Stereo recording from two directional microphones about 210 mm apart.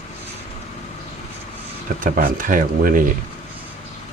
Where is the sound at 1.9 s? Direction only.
40° right (ahead or behind).